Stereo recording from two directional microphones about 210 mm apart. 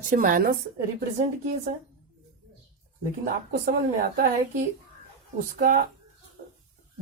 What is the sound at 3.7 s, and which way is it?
Speech, 45° right (ahead or behind).